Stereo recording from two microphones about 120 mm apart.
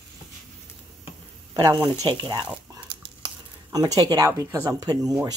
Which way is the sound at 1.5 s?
35° right (ahead or behind).